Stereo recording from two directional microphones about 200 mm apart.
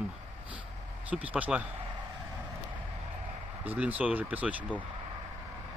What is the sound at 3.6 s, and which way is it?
Speech, 10° right (ahead or behind).